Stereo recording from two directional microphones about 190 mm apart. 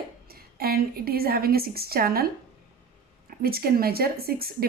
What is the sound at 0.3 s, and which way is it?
A woman's voice, 55° right (ahead or behind).